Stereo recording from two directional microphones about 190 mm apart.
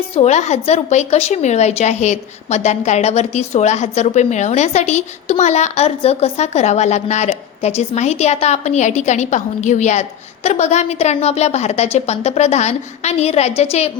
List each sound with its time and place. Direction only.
0.2 s speech: 35° left (ahead or behind)